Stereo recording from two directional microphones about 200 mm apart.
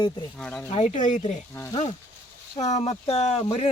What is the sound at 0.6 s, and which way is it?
Speech, 35° left (ahead or behind).